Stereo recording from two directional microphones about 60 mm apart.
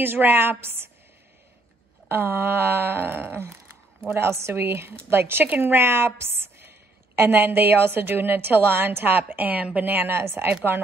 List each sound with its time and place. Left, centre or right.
0.0 s a woman's voice: right
2.0 s a woman's voice: right